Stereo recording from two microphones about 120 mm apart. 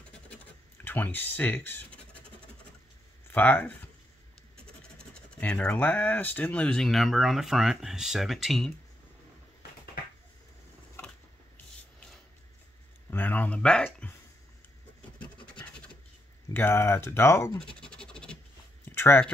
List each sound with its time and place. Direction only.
0.8 s speech: 15° left (ahead or behind)
3.3 s speech: 15° left (ahead or behind)
4.9 s speech: 5° left (ahead or behind)
13.1 s a sound: 15° left (ahead or behind)
15.1 s scratch: 10° left (ahead or behind)
16.5 s speech: 20° left (ahead or behind)
17.6 s scratch: 5° left (ahead or behind)
18.9 s a sound: 20° left (ahead or behind)